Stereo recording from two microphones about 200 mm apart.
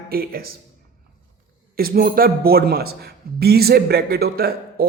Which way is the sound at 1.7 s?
50° right (ahead or behind).